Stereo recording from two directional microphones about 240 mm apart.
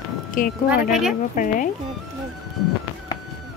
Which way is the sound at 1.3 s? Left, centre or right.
Left.